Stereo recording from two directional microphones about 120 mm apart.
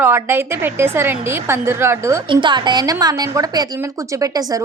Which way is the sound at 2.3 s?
40° right (ahead or behind).